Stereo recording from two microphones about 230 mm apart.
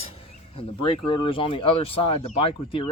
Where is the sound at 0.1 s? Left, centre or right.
Left.